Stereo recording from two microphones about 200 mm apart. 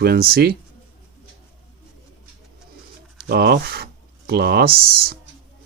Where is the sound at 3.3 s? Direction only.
50° right (ahead or behind).